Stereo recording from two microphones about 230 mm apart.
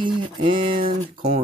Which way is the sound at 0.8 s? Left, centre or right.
Right.